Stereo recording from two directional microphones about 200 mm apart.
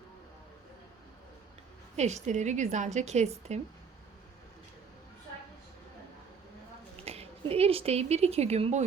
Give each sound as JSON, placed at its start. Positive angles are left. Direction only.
{"t": 2.0, "sound": "a woman's voice", "side_deg": -35}
{"t": 7.0, "sound": "a woman's voice", "side_deg": -30}